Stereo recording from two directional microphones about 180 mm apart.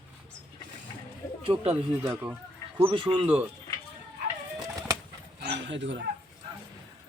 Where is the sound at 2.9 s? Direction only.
25° right (ahead or behind).